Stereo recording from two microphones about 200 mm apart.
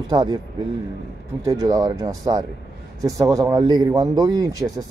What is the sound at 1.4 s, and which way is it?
Speech, 15° right (ahead or behind).